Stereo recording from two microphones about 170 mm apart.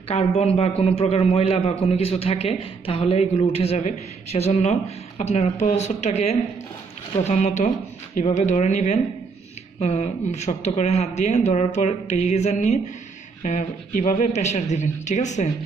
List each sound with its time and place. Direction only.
0.1 s a man's voice: 35° left (ahead or behind)